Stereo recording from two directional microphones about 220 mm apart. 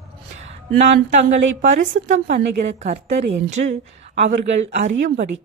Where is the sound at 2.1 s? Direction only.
30° right (ahead or behind).